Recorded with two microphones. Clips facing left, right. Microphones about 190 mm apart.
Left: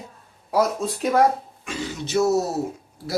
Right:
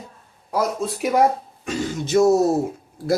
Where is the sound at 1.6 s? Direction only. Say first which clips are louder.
Right 5 dB; 45° right (ahead or behind).